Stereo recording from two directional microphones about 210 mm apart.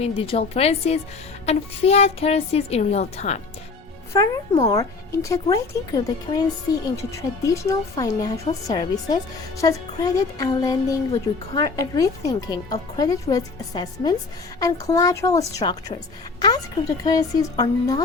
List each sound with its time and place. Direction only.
0.0 s a woman's voice: 30° left (ahead or behind)
4.1 s speech: 15° left (ahead or behind)
17.0 s speech: 15° left (ahead or behind)